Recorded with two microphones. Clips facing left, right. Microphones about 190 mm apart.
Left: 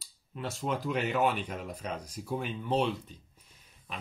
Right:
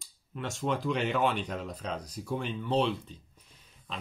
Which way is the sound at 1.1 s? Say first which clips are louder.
Even; 10° left (ahead or behind).